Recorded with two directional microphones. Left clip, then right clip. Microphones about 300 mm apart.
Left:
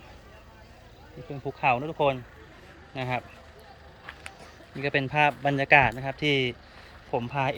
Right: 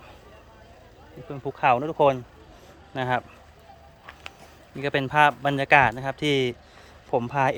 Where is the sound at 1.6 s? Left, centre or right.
Centre.